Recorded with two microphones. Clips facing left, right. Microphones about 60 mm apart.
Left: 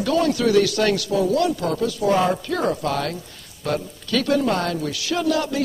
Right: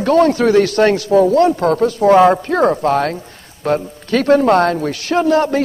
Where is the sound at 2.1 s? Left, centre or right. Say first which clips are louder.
Right 13 dB; right.